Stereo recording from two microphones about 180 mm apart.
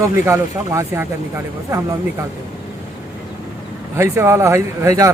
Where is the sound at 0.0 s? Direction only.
15° right (ahead or behind).